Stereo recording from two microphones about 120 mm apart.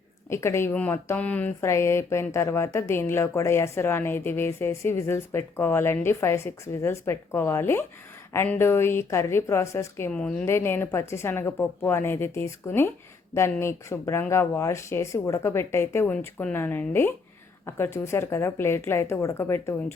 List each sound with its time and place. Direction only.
0.3 s speech: 20° left (ahead or behind)
0.7 s speech: 10° left (ahead or behind)
10.1 s speech: 10° left (ahead or behind)
10.4 s speech: 20° left (ahead or behind)